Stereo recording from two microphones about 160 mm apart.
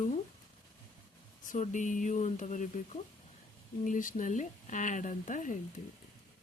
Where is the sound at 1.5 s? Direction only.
50° left (ahead or behind).